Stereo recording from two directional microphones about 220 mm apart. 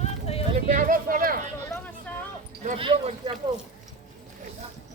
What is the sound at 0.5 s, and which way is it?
Speech, 40° right (ahead or behind).